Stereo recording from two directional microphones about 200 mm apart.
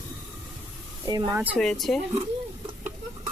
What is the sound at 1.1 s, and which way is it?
Speech, 20° right (ahead or behind).